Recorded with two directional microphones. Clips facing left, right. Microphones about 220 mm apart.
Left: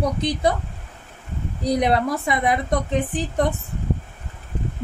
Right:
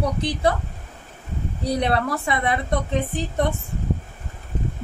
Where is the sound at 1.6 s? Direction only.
15° left (ahead or behind).